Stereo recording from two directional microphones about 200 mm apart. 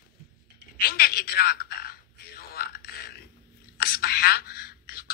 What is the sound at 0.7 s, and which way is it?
A woman's voice, 50° left (ahead or behind).